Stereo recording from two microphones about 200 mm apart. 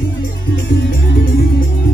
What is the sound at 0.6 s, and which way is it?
Music, 50° left (ahead or behind).